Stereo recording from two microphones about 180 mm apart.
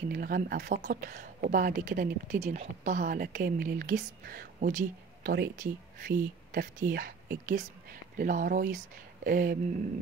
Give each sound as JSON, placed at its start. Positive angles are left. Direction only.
{"t": 0.1, "sound": "speech", "side_deg": -50}